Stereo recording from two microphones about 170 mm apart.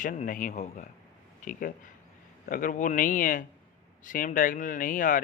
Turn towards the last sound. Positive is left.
turn(degrees=50)  # may be behind; listen again after turning